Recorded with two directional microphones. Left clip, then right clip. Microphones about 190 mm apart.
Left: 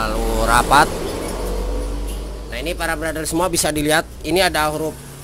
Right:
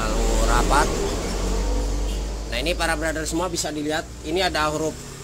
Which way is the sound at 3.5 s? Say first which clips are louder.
Left 8 dB; 40° left (ahead or behind).